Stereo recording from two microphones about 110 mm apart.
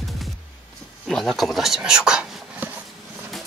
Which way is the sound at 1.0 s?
5° left (ahead or behind).